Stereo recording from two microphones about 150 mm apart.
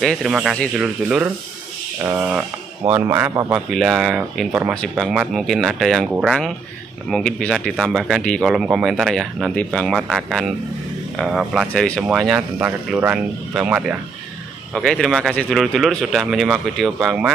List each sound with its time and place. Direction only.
0.0 s speech: centre (ahead or behind); by 3.6 s 20° right (ahead or behind)
3.7 s speech: 5° right (ahead or behind)
14.7 s speech: 5° left (ahead or behind)